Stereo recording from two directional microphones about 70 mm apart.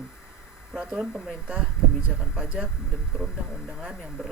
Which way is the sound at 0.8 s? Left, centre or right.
Centre.